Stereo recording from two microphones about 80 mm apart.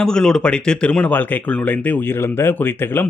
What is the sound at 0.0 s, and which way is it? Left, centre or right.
Speech, centre.